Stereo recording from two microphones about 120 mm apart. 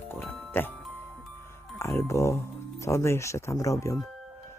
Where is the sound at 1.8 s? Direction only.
25° left (ahead or behind).